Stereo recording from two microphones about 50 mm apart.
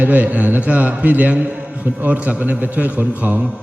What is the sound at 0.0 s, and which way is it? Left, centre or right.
A man's voice, right.